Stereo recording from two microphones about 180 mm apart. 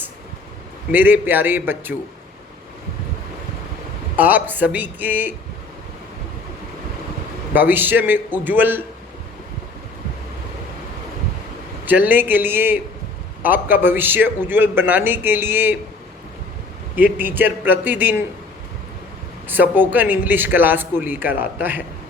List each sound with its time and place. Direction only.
0.9 s a man's voice: 10° right (ahead or behind)
4.2 s a man's voice: 10° right (ahead or behind)
7.5 s a man's voice: 10° right (ahead or behind)
11.9 s a man's voice: 10° right (ahead or behind)
16.9 s a man's voice: 10° right (ahead or behind)
19.5 s a man's voice: 10° right (ahead or behind)